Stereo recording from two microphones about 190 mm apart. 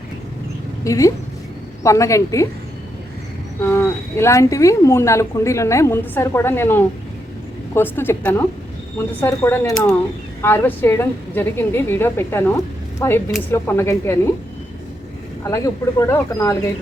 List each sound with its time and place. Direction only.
0.9 s speech: 15° left (ahead or behind)
3.6 s speech: 15° left (ahead or behind)
15.4 s speech: 15° left (ahead or behind)